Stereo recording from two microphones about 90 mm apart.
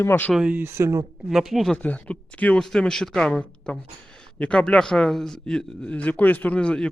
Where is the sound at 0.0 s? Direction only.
25° left (ahead or behind).